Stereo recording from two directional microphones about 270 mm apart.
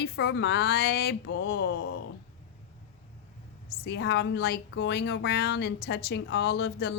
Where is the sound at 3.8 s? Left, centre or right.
Left.